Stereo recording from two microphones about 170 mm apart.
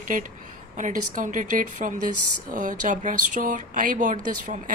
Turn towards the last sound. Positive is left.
turn(degrees=-50)  # may be behind; listen again after turning